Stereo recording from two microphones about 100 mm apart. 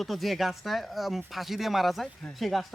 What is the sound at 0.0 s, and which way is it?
Speech, centre (ahead or behind).